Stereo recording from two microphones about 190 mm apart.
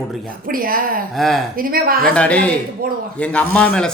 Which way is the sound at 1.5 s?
50° right (ahead or behind).